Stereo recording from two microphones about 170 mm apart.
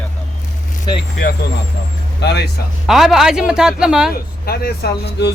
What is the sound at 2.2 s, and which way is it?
Speech, 80° left.